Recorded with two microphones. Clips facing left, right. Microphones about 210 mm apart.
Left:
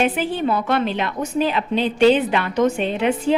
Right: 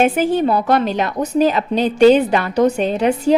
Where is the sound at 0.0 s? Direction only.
45° right (ahead or behind).